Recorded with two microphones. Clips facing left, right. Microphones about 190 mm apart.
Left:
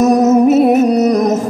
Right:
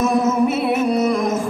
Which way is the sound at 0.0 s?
45° left (ahead or behind).